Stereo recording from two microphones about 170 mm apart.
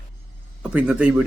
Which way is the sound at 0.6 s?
5° right (ahead or behind).